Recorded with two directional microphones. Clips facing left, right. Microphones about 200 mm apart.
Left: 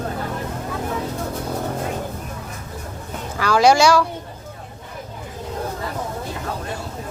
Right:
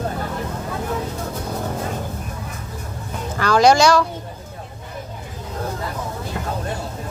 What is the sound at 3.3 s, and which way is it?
Speech, 5° left (ahead or behind).